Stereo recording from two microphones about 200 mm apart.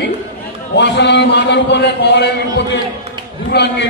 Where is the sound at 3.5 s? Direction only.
60° left (ahead or behind).